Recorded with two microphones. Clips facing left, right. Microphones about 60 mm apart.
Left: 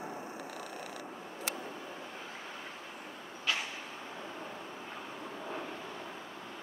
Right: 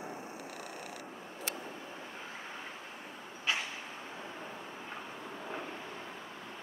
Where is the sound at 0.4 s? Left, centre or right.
Centre.